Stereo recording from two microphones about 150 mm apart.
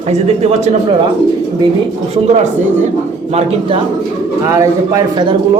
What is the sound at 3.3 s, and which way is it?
Speech, 45° right (ahead or behind).